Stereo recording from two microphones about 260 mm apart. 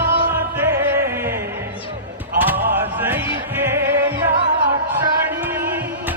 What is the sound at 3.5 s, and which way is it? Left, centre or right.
Music, centre.